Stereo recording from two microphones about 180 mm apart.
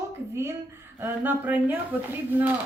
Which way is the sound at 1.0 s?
10° right (ahead or behind).